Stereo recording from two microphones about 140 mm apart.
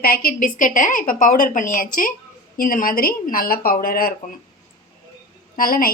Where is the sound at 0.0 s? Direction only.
90° left.